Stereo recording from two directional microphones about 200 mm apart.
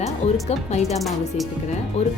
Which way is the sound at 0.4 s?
35° left (ahead or behind).